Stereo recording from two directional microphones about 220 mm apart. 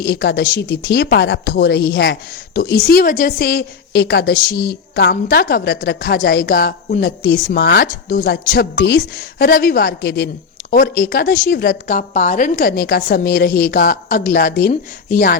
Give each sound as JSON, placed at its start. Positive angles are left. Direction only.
{"t": 0.0, "sound": "a woman's voice", "side_deg": 45}